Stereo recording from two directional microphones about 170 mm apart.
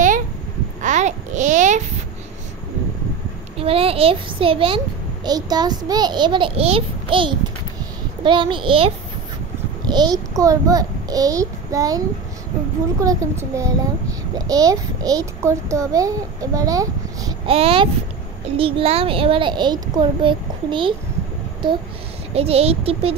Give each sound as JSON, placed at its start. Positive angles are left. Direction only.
{"t": 0.8, "sound": "babbling", "side_deg": -45}
{"t": 3.5, "sound": "a child's voice", "side_deg": -35}
{"t": 13.0, "sound": "a child's voice", "side_deg": -20}
{"t": 17.5, "sound": "a child's voice", "side_deg": -35}
{"t": 22.3, "sound": "a child's voice", "side_deg": -35}